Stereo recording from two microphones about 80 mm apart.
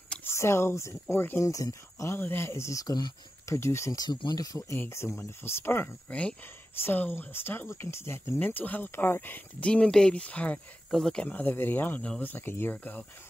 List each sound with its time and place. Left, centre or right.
0.2 s speech: left
1.4 s speech: left
3.4 s speech: left
3.9 s speech: left
4.7 s speech: left
8.4 s speech: left
9.7 s speech: centre
11.2 s speech: left